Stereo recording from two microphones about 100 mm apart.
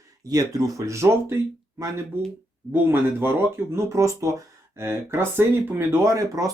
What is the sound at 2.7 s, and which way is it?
Speech, 20° right (ahead or behind).